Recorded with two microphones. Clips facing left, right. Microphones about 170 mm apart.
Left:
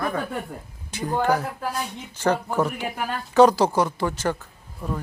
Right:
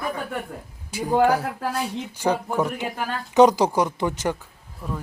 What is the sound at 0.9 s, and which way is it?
Speech, 10° right (ahead or behind).